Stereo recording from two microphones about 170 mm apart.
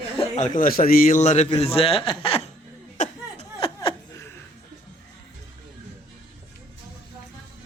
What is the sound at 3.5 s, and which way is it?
Laughter, 30° left (ahead or behind).